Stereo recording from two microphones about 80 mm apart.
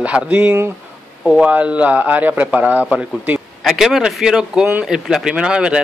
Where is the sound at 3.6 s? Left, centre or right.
Centre.